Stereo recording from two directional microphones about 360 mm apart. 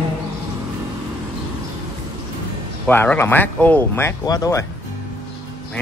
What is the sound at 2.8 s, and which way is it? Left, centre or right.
Speech, centre.